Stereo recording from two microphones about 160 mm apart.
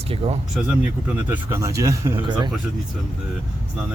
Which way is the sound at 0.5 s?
10° right (ahead or behind).